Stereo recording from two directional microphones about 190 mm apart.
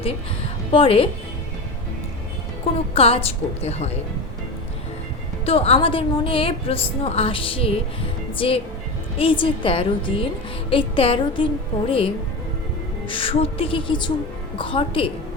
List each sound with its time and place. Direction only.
0.7 s a woman's voice: 30° left (ahead or behind)
2.9 s a woman's voice: 30° left (ahead or behind)
5.5 s a woman's voice: 30° left (ahead or behind)